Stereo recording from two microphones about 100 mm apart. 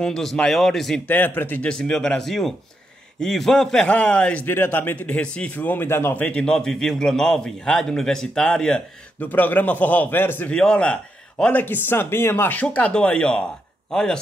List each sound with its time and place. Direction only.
0.0 s speech: 5° left (ahead or behind)
1.0 s a man's voice: 20° left (ahead or behind)
9.3 s a man's voice: 15° left (ahead or behind)
10.5 s a man's voice: 10° left (ahead or behind)